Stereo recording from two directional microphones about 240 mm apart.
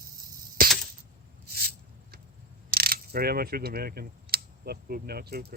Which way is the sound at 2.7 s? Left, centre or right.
Right.